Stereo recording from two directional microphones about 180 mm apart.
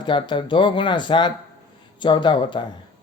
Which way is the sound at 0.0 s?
25° left (ahead or behind).